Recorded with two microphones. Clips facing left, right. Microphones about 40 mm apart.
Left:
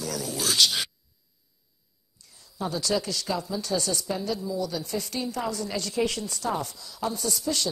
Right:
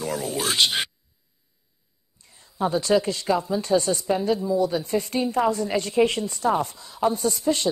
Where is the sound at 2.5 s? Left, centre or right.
Right.